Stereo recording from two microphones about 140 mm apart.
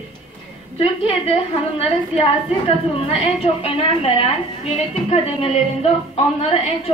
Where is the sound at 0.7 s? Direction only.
45° left (ahead or behind).